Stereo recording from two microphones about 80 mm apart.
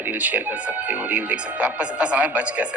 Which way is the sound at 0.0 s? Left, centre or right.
Right.